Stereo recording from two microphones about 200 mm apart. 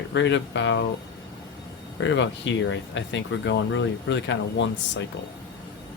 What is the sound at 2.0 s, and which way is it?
Speech, 65° left (ahead or behind).